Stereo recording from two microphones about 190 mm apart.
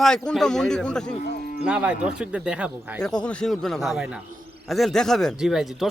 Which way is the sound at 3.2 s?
5° left (ahead or behind).